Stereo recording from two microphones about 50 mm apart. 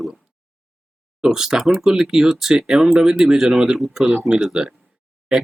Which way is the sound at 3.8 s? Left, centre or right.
Centre.